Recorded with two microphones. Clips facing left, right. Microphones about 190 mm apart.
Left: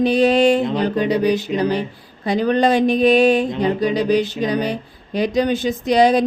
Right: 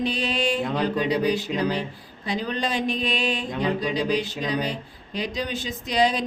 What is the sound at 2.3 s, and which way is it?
Speech, 60° left (ahead or behind).